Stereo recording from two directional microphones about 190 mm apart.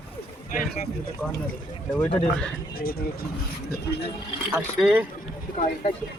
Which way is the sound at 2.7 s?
50° left (ahead or behind).